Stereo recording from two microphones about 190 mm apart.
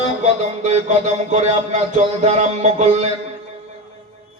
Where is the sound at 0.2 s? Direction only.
35° right (ahead or behind).